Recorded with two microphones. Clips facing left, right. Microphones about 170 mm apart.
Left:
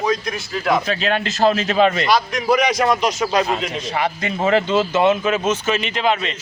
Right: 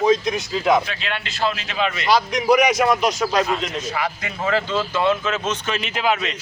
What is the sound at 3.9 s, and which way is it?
Speech, 25° left (ahead or behind).